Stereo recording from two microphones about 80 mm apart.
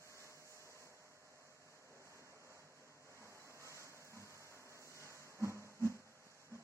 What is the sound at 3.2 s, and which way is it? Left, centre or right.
Vehicle, right.